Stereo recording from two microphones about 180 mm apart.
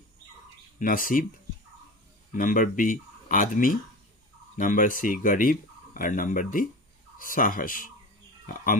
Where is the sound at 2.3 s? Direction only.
50° left (ahead or behind).